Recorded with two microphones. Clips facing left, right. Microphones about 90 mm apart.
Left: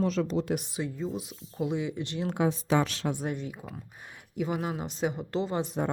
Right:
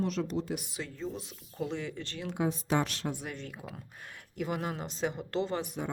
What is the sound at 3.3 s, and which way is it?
Speech, 10° left (ahead or behind).